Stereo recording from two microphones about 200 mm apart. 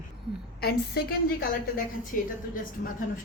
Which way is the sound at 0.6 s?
50° left (ahead or behind).